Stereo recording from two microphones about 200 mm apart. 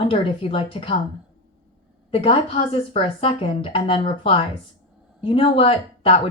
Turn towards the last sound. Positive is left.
turn(degrees=30)  # may be behind; listen again after turning